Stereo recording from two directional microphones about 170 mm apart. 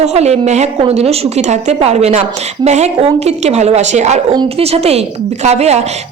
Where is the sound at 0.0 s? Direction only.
40° right (ahead or behind).